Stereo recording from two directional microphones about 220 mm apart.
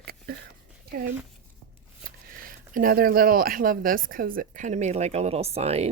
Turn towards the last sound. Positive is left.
turn(degrees=-30)  # may be behind; listen again after turning